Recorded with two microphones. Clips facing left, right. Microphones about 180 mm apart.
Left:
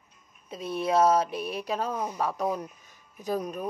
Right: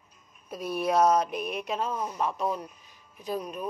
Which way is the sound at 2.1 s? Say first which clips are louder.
Left 1 dB; 45° left (ahead or behind).